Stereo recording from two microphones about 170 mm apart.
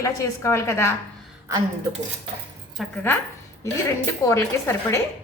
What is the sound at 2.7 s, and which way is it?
A woman's voice, 10° left (ahead or behind).